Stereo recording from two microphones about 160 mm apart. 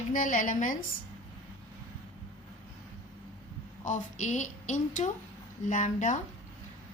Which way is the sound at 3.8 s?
50° left (ahead or behind).